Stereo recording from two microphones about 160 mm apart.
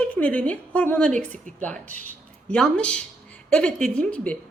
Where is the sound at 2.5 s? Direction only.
5° left (ahead or behind).